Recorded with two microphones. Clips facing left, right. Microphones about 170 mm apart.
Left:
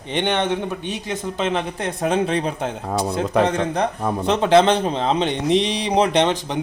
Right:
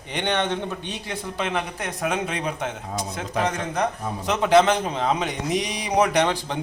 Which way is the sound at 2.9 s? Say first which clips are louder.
Left 8 dB; 65° left (ahead or behind).